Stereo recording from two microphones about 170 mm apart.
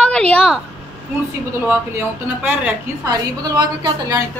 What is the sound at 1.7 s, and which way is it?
A woman's voice, 15° right (ahead or behind).